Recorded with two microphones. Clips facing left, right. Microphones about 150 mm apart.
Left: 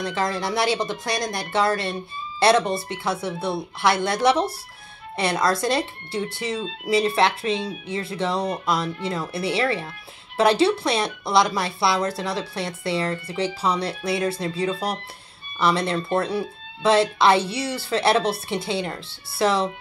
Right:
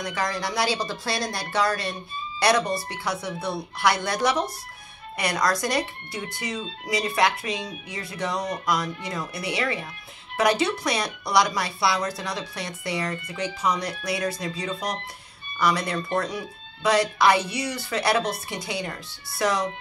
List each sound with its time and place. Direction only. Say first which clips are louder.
0.0 s speech: left 3 dB; 25° left (ahead or behind)